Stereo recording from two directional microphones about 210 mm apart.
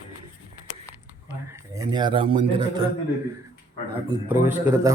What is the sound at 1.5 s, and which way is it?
Speech, 15° right (ahead or behind).